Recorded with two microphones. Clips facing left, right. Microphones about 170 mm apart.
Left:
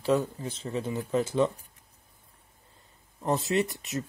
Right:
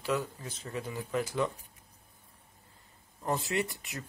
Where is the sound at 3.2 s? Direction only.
20° left (ahead or behind).